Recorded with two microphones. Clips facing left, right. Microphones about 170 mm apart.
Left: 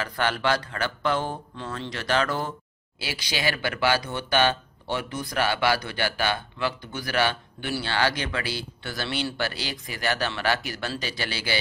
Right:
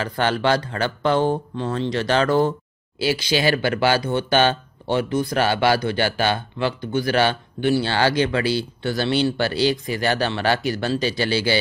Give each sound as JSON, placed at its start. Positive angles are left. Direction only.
{"t": 0.0, "sound": "speech", "side_deg": -25}